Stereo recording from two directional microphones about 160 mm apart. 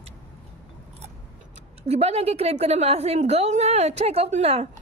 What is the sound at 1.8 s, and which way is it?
A woman's voice, 40° right (ahead or behind).